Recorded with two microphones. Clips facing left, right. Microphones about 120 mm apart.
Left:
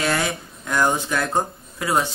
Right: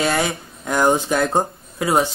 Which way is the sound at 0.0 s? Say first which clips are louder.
Right 3 dB; 25° right (ahead or behind).